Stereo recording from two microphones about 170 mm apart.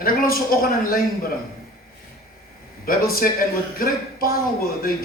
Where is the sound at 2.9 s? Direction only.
60° left (ahead or behind).